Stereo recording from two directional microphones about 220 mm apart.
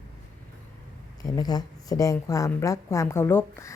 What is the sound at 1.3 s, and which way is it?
A woman's voice, 15° left (ahead or behind).